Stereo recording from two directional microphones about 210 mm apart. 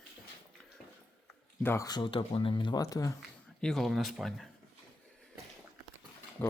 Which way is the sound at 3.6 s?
Centre (ahead or behind).